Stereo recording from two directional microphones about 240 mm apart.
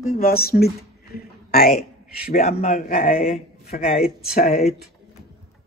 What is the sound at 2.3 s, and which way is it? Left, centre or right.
A man's voice, left.